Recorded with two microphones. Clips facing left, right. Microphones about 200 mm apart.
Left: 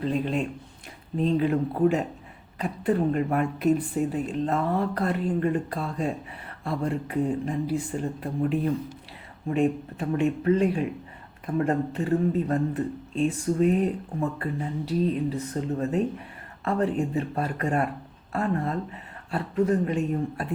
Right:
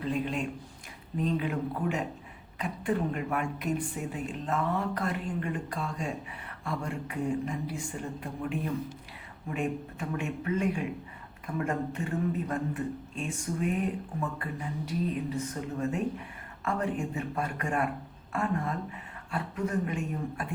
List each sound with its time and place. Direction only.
0.0 s speech: 35° left (ahead or behind)
16.6 s speech: 35° left (ahead or behind)